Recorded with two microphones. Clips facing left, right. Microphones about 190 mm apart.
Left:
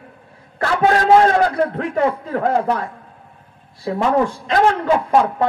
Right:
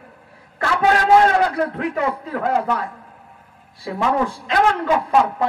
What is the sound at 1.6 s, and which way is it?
A woman's voice, 30° left (ahead or behind).